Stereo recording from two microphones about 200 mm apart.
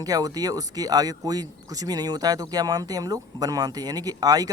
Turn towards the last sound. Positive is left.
turn(degrees=-20)  # may be behind; listen again after turning